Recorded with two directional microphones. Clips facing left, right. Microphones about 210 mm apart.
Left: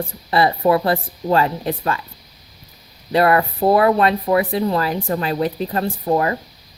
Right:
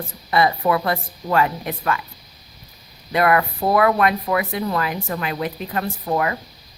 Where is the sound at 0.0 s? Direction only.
30° left (ahead or behind).